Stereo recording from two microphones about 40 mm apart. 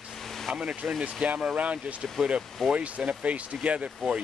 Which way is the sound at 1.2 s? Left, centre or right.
Right.